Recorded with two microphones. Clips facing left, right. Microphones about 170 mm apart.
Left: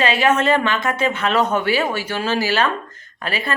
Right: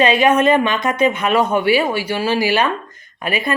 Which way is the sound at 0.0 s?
15° right (ahead or behind).